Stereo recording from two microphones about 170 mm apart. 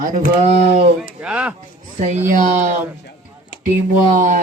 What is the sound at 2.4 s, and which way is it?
Speech, 45° right (ahead or behind).